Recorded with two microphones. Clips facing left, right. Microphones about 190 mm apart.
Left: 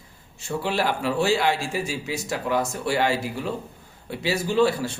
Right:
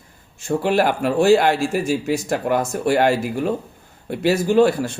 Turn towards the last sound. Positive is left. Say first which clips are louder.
# right 5 dB
turn(degrees=-50)  # may be behind; listen again after turning